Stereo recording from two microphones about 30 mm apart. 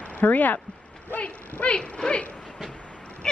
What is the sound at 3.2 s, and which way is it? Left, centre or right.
Dog, left.